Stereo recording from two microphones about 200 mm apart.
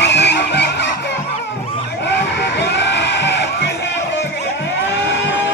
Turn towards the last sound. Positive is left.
turn(degrees=60)  # may be behind; listen again after turning